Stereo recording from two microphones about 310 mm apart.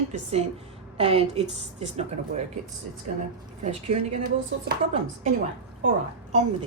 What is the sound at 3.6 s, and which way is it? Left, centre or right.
Speech, centre.